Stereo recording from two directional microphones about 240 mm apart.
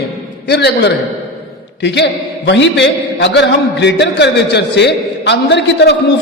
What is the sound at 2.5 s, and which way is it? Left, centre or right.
A man's voice, left.